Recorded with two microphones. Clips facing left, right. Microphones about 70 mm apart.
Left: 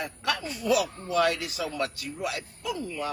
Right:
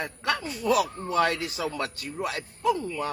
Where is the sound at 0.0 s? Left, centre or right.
Right.